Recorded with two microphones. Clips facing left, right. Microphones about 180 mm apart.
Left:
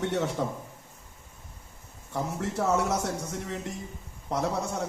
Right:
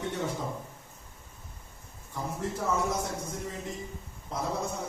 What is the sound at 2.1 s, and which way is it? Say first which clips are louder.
Speech: left 4 dB; 75° left (ahead or behind).